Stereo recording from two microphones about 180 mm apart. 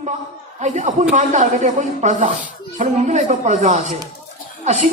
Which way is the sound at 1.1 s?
40° right (ahead or behind).